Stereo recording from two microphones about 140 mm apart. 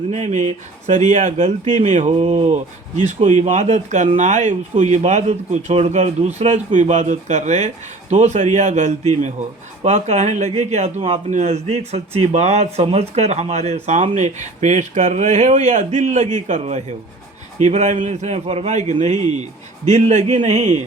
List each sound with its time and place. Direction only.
0.1 s speech: 55° right (ahead or behind)